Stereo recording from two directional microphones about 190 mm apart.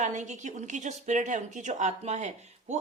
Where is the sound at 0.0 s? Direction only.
40° right (ahead or behind).